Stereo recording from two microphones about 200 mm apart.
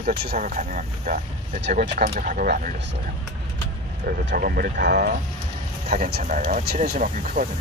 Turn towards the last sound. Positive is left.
turn(degrees=-40)  # may be behind; listen again after turning